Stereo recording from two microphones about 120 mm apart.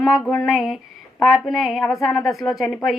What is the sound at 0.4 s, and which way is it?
A woman's voice, 5° right (ahead or behind).